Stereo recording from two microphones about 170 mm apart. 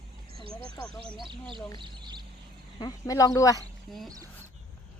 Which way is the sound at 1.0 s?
30° right (ahead or behind).